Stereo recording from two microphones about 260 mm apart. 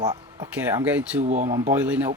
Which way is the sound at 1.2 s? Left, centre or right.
Right.